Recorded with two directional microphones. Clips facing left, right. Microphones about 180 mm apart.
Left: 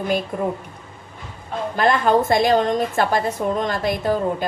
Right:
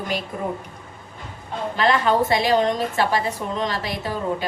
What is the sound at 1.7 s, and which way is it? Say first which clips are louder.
A woman's voice: left 2 dB; 50° left (ahead or behind).